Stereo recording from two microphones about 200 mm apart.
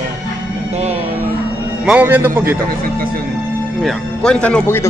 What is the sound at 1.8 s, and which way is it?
Speech, 10° right (ahead or behind).